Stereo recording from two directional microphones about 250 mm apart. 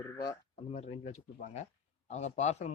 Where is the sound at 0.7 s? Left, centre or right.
Left.